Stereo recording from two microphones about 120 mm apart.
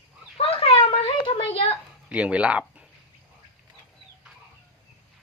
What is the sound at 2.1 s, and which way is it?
Speech, 10° right (ahead or behind).